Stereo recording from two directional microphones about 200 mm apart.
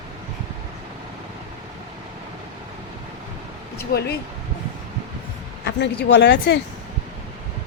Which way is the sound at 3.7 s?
50° left (ahead or behind).